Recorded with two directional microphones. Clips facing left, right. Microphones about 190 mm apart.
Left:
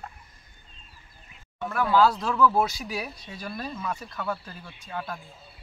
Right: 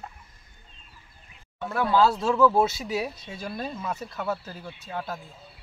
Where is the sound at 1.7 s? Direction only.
25° right (ahead or behind).